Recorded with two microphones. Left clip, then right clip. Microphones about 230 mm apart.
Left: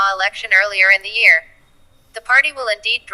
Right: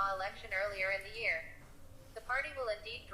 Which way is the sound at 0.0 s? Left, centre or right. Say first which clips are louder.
Left 19 dB; left.